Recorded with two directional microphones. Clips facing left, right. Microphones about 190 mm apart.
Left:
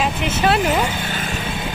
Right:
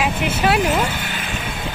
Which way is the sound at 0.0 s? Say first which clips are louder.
Even; 10° right (ahead or behind).